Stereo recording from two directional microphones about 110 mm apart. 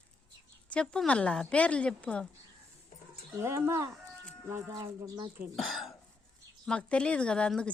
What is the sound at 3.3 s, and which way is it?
Speech, 25° right (ahead or behind).